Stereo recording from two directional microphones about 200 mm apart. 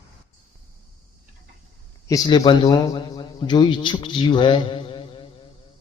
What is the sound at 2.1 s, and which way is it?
A man's voice, 20° left (ahead or behind).